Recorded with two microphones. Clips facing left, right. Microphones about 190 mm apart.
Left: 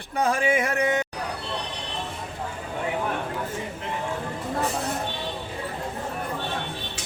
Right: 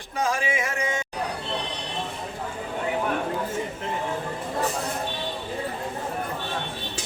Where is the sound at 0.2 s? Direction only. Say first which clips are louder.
Left 3 dB; 55° left (ahead or behind).